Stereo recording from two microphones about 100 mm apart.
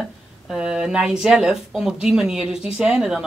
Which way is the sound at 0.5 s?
10° right (ahead or behind).